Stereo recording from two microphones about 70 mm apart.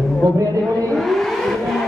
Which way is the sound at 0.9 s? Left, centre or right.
Centre.